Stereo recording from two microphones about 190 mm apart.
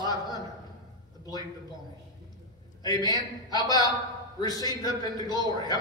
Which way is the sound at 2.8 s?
20° left (ahead or behind).